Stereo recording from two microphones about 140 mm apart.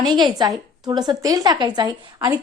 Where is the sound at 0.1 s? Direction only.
30° right (ahead or behind).